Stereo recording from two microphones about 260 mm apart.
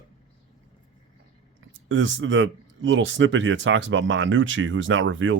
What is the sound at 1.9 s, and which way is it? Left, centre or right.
Speech, right.